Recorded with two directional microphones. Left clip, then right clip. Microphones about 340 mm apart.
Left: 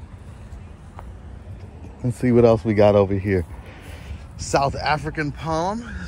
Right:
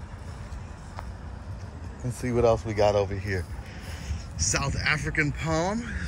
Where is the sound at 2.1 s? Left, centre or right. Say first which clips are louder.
Left 7 dB; left.